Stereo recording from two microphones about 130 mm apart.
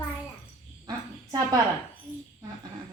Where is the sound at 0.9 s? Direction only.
30° right (ahead or behind).